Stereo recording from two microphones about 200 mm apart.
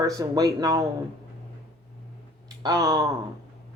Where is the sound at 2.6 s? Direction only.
20° right (ahead or behind).